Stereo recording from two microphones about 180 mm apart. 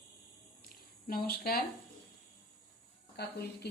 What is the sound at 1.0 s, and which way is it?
Speech, 55° left (ahead or behind).